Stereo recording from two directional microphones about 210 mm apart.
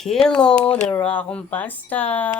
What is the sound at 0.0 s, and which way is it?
Speech, centre (ahead or behind).